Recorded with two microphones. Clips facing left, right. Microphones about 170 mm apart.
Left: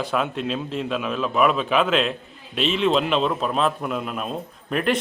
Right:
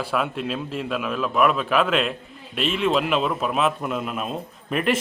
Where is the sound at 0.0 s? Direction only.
5° right (ahead or behind).